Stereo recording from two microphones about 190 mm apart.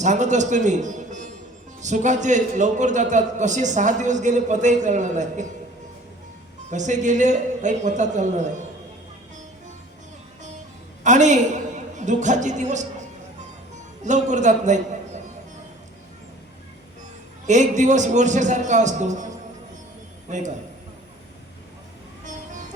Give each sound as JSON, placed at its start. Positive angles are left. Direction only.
{"t": 0.0, "sound": "a man's voice", "side_deg": -40}
{"t": 6.7, "sound": "a man's voice", "side_deg": -40}
{"t": 11.0, "sound": "a woman's voice", "side_deg": -40}
{"t": 17.4, "sound": "a man's voice", "side_deg": -40}
{"t": 20.3, "sound": "a man's voice", "side_deg": -40}